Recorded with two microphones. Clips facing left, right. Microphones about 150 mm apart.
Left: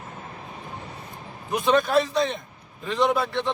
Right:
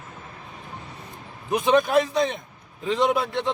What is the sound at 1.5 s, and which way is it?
Speech, 15° right (ahead or behind).